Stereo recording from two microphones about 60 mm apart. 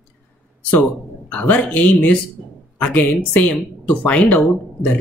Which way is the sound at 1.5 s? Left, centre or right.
Left.